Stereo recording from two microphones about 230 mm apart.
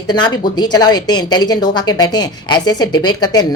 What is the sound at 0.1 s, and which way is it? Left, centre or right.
A woman's voice, centre.